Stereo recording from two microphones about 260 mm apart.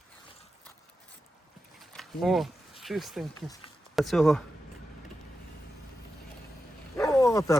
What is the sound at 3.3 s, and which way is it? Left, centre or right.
Speech, centre.